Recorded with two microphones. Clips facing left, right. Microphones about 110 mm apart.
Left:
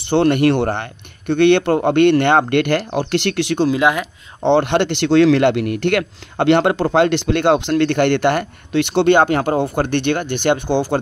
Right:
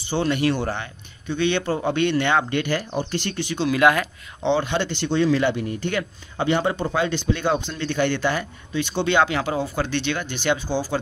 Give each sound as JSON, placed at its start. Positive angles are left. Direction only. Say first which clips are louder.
{"t": 0.0, "sound": "speech", "louder": "left 8 dB", "side_deg": 65}
{"t": 3.7, "sound": "speech", "louder": "left 1 dB", "side_deg": 20}
{"t": 4.5, "sound": "speech", "louder": "left 7 dB", "side_deg": 60}